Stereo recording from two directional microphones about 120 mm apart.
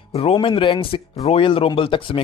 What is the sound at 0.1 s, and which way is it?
Speech, 55° left (ahead or behind).